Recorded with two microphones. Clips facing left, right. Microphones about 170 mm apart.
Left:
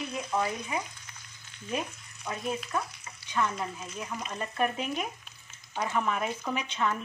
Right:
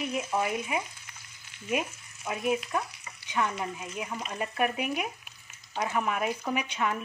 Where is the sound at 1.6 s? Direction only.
10° right (ahead or behind).